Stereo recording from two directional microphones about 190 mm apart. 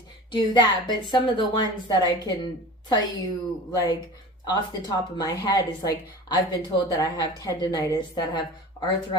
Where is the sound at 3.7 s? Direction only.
20° left (ahead or behind).